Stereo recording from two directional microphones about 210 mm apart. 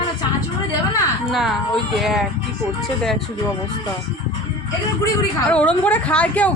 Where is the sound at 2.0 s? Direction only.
Centre (ahead or behind).